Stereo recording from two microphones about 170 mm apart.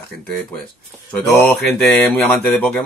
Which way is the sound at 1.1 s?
5° left (ahead or behind).